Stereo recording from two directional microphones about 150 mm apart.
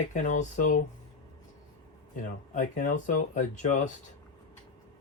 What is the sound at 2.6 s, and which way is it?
Speech, 60° left (ahead or behind).